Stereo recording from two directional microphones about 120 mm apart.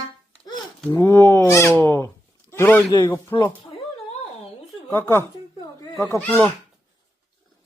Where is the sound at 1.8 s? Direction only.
15° left (ahead or behind).